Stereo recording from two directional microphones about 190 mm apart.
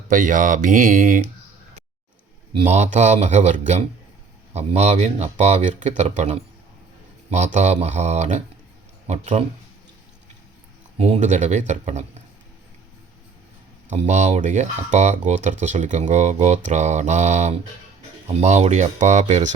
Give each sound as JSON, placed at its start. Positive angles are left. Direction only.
{"t": 0.1, "sound": "speech", "side_deg": -45}
{"t": 2.6, "sound": "speech", "side_deg": -35}
{"t": 10.9, "sound": "speech", "side_deg": -35}
{"t": 13.9, "sound": "speech", "side_deg": -35}